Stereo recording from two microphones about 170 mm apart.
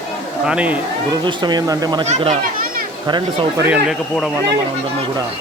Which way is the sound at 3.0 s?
25° right (ahead or behind).